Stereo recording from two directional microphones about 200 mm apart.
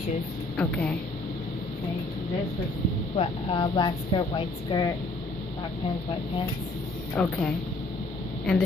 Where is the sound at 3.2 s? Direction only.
25° left (ahead or behind).